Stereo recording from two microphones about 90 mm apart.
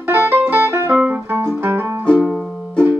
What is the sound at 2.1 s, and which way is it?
Music, 10° left (ahead or behind).